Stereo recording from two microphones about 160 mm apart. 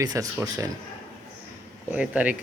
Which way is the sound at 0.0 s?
20° right (ahead or behind).